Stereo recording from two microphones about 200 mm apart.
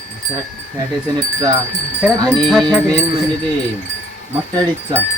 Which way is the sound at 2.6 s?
15° right (ahead or behind).